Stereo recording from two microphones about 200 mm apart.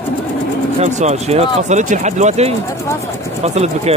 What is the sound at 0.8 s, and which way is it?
Speech, 35° right (ahead or behind).